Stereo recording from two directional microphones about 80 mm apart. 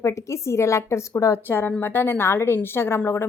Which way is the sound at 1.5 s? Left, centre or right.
Left.